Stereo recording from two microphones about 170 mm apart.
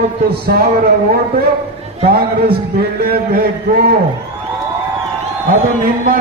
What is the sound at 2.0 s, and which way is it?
A man's voice, 65° right (ahead or behind).